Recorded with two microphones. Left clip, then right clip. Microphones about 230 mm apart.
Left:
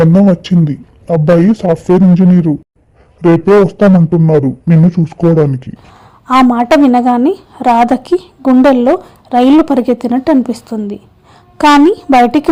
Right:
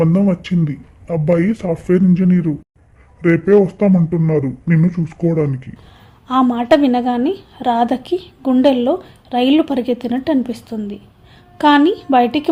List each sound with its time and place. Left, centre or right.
0.0 s speech: left
6.2 s a woman's voice: left